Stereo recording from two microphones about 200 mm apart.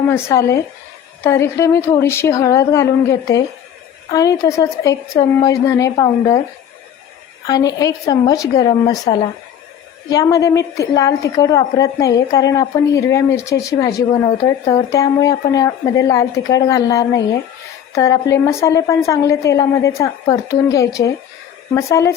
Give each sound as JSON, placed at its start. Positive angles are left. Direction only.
{"t": 0.1, "sound": "a woman's voice", "side_deg": 15}
{"t": 7.4, "sound": "a woman's voice", "side_deg": 20}